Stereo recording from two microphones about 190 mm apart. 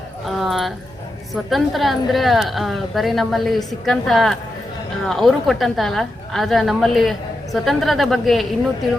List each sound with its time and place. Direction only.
0.3 s a woman's voice: centre (ahead or behind)